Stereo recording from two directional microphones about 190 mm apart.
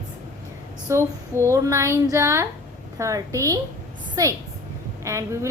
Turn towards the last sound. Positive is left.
turn(degrees=-15)  # may be behind; listen again after turning